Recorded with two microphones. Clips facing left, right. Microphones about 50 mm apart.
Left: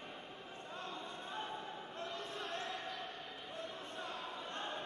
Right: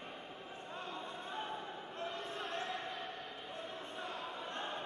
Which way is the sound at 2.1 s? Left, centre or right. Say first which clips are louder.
Right 2 dB; centre.